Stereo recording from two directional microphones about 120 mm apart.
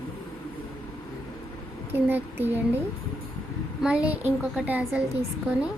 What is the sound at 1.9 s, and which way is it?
Speech, 15° right (ahead or behind).